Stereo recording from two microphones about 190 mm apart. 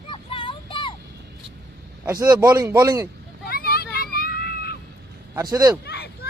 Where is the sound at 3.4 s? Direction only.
50° left (ahead or behind).